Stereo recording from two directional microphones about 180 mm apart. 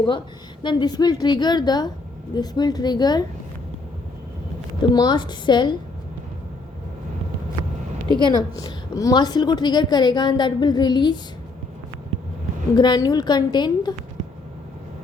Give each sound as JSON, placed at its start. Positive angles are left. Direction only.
{"t": 0.6, "sound": "a woman's voice", "side_deg": 25}
{"t": 4.8, "sound": "a woman's voice", "side_deg": 25}
{"t": 8.2, "sound": "a woman's voice", "side_deg": 25}
{"t": 12.7, "sound": "a woman's voice", "side_deg": 25}